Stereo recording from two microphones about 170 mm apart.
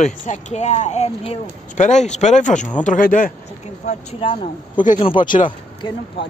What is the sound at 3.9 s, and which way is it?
Speech, 35° left (ahead or behind).